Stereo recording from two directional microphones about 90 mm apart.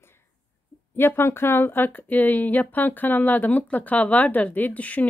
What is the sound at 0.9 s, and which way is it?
Speech, 25° left (ahead or behind).